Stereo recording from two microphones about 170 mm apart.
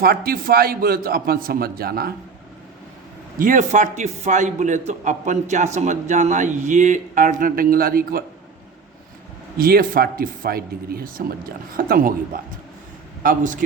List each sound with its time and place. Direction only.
0.0 s speech: 60° right (ahead or behind)
3.3 s a man's voice: 50° right (ahead or behind)
9.6 s speech: 60° right (ahead or behind)
13.2 s a man's voice: 50° right (ahead or behind)